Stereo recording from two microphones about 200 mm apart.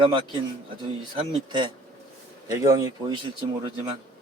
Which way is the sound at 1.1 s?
25° right (ahead or behind).